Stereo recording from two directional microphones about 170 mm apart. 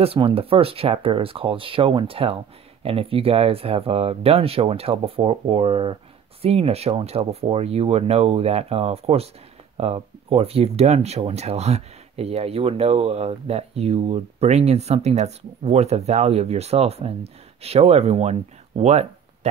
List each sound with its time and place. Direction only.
0.0 s speech: 35° right (ahead or behind)